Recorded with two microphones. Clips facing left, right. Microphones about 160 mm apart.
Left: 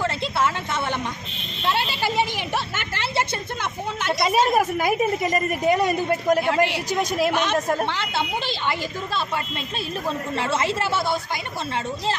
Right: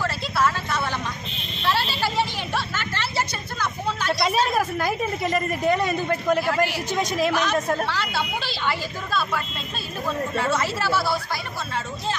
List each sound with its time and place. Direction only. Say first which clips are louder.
0.0 s a sound: even; 20° left (ahead or behind)
4.2 s a woman's voice: left 4 dB; 10° left (ahead or behind)
6.4 s speech: left 2 dB; 25° left (ahead or behind)
6.9 s a woman's voice: left 1 dB; 10° left (ahead or behind)
7.8 s speech: left 1 dB; 20° left (ahead or behind)